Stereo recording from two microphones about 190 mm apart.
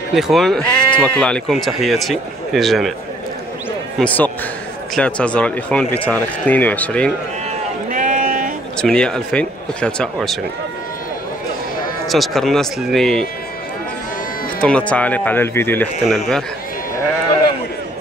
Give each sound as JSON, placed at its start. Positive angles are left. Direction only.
{"t": 0.1, "sound": "speech", "side_deg": 0}
{"t": 4.0, "sound": "speech", "side_deg": 10}
{"t": 7.9, "sound": "sheep", "side_deg": -45}
{"t": 8.8, "sound": "speech", "side_deg": 5}
{"t": 12.1, "sound": "speech", "side_deg": 0}
{"t": 14.6, "sound": "speech", "side_deg": 5}